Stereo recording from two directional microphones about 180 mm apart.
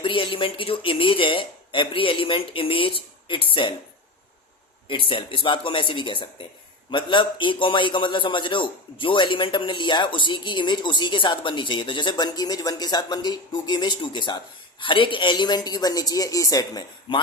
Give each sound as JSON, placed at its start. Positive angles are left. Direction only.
{"t": 0.0, "sound": "a man's voice", "side_deg": 30}
{"t": 4.9, "sound": "a man's voice", "side_deg": 30}